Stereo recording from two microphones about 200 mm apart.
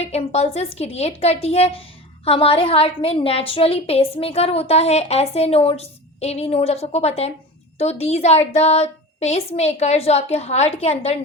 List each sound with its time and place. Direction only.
0.0 s a woman's voice: 30° left (ahead or behind)